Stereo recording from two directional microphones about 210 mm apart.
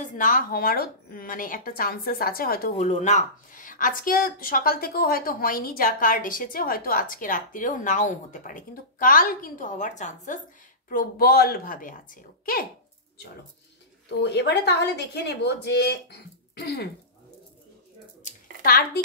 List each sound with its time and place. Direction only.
0.0 s speech: 40° left (ahead or behind)
14.3 s speech: 55° left (ahead or behind)
18.2 s a sound: 45° left (ahead or behind)